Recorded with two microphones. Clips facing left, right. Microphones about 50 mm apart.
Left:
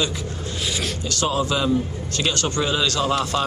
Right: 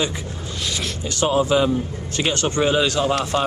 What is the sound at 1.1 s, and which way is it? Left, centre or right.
A man's voice, right.